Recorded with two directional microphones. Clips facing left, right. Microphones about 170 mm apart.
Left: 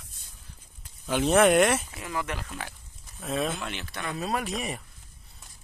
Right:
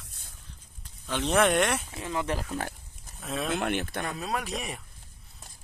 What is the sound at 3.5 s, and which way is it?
Speech, 55° right (ahead or behind).